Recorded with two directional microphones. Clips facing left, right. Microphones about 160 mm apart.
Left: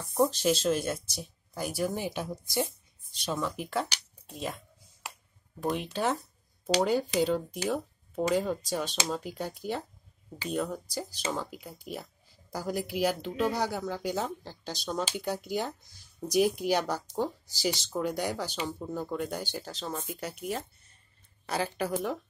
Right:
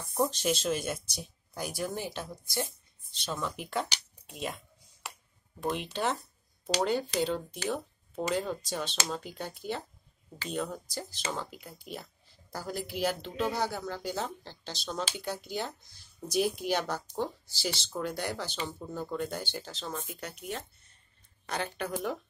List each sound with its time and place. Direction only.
0.1 s speech: centre (ahead or behind)
2.3 s speech: 15° left (ahead or behind)
3.3 s speech: 5° left (ahead or behind)
5.6 s speech: centre (ahead or behind)